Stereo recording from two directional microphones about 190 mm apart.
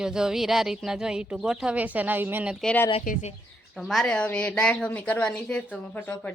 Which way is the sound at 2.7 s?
10° left (ahead or behind).